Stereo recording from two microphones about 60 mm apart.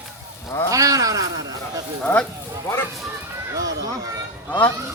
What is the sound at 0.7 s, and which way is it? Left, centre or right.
Speech, right.